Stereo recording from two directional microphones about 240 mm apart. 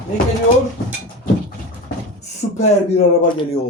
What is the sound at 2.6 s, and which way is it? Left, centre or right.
Speech, left.